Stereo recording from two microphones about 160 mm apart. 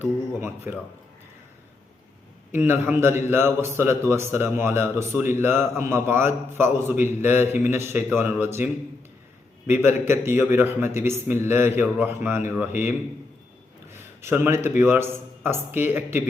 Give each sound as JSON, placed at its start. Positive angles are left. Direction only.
{"t": 0.0, "sound": "a man's voice", "side_deg": -15}
{"t": 2.5, "sound": "a man's voice", "side_deg": -15}
{"t": 13.9, "sound": "a man's voice", "side_deg": -15}